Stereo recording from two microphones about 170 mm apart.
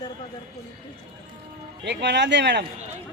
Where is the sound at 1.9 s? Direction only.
90° right.